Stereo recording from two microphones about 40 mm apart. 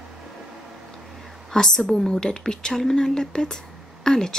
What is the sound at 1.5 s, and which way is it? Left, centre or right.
A woman's voice, centre.